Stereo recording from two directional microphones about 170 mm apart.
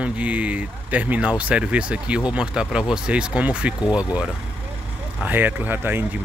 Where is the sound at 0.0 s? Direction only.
10° right (ahead or behind).